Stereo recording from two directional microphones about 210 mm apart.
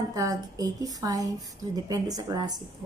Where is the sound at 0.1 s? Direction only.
15° right (ahead or behind).